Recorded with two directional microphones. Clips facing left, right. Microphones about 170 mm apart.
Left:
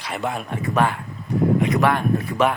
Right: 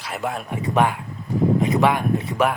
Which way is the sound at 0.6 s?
15° right (ahead or behind).